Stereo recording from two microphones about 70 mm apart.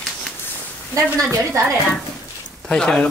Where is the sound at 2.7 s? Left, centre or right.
Centre.